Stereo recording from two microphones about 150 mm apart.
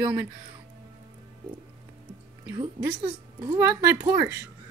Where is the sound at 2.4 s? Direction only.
30° right (ahead or behind).